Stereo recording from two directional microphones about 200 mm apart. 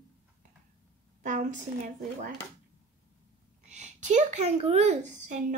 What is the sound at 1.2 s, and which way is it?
Speech, 40° right (ahead or behind).